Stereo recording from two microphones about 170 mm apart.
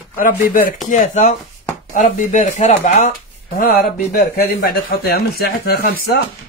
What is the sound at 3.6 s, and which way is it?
Speech, 60° left (ahead or behind).